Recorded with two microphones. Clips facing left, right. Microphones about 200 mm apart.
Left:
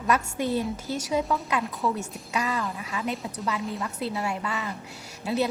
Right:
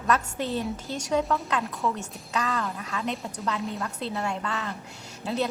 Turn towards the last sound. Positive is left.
turn(degrees=10)  # may be behind; listen again after turning